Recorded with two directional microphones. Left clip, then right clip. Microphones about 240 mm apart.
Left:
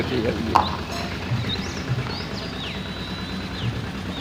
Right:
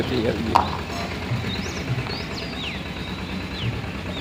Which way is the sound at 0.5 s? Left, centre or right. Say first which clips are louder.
Even; centre.